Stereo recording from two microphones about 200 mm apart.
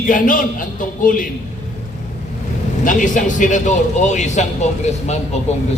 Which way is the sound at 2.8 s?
40° left (ahead or behind).